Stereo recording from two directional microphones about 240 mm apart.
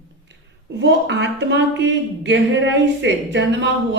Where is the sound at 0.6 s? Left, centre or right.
Right.